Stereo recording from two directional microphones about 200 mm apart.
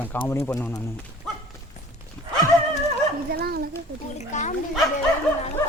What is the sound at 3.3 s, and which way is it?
Dog, 50° right (ahead or behind).